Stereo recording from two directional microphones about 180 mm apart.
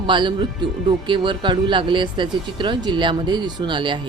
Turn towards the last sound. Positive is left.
turn(degrees=-25)  # may be behind; listen again after turning